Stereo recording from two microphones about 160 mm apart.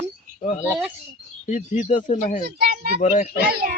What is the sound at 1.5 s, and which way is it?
Speech, 50° left (ahead or behind).